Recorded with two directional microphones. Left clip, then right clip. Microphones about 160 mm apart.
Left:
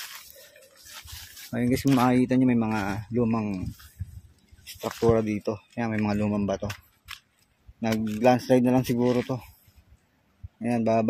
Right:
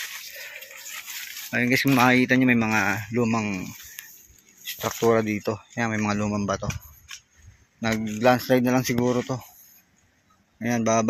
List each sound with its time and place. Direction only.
1.5 s speech: 15° left (ahead or behind)
5.1 s speech: 10° left (ahead or behind)
6.0 s speech: 25° left (ahead or behind)
7.9 s speech: 5° left (ahead or behind)
8.2 s speech: 30° left (ahead or behind)
9.0 s speech: 10° left (ahead or behind)
10.6 s speech: 5° left (ahead or behind)